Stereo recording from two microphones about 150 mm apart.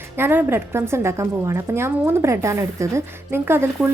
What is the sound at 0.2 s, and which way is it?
A woman's voice, 15° right (ahead or behind).